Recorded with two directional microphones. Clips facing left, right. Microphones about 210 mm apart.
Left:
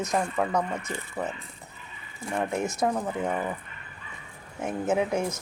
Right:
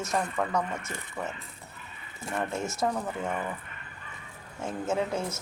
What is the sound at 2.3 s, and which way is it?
Speech, 15° left (ahead or behind).